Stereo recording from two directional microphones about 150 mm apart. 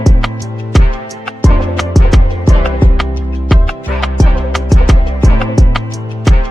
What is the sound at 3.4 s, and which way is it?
Music, centre (ahead or behind).